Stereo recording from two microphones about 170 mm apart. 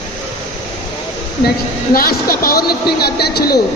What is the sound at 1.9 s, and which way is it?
A man's voice, 60° left (ahead or behind).